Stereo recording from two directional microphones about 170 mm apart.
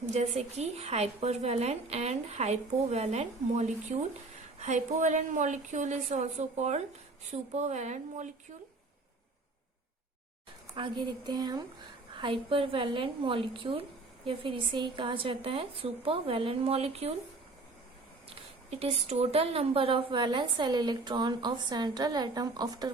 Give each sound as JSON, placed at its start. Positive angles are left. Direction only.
{"t": 0.1, "sound": "a woman's voice", "side_deg": -40}
{"t": 10.8, "sound": "speech", "side_deg": -25}
{"t": 18.7, "sound": "speech", "side_deg": -35}